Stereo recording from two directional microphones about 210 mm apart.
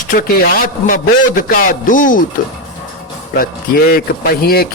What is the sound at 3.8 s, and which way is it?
Speech, 45° left (ahead or behind).